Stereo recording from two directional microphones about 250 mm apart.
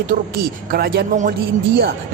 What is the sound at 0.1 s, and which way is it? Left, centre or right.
Speech, right.